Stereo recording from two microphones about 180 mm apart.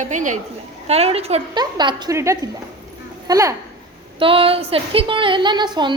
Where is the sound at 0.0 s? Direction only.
45° right (ahead or behind); by 3.5 s 20° right (ahead or behind).